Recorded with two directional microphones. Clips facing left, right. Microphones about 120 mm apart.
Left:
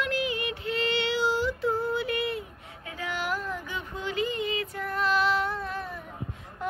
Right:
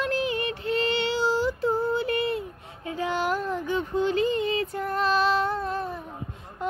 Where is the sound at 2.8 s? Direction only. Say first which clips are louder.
Right 6 dB; 30° right (ahead or behind).